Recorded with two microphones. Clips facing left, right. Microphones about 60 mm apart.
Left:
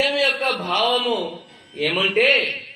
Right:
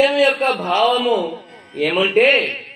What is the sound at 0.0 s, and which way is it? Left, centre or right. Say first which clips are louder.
A man's voice: right 6 dB; right.